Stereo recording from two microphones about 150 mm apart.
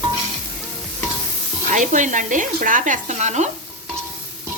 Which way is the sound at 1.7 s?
55° right (ahead or behind).